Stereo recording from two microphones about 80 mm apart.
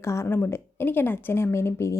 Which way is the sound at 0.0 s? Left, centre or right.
Left.